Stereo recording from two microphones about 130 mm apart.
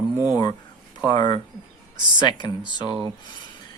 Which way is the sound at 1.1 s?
35° left (ahead or behind).